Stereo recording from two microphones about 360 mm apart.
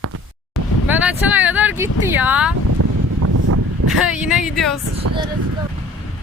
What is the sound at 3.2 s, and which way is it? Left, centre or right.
Wind, right.